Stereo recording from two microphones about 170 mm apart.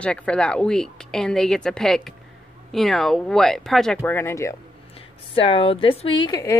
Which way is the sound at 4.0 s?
15° left (ahead or behind).